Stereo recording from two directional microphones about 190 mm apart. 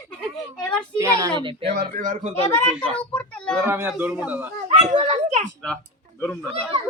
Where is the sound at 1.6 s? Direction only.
45° right (ahead or behind).